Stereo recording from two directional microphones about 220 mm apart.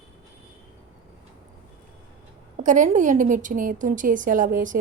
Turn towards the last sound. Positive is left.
turn(degrees=-35)  # may be behind; listen again after turning